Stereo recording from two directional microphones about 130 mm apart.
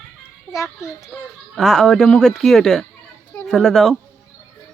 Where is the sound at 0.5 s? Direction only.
20° left (ahead or behind).